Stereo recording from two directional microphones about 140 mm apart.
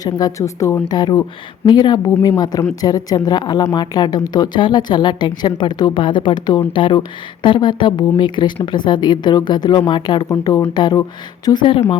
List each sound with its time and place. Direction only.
0.0 s a woman's voice: 25° left (ahead or behind)
10.2 s a woman's voice: 20° left (ahead or behind)